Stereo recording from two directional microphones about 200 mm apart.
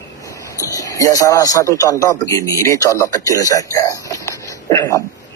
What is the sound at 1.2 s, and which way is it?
Speech, 15° left (ahead or behind).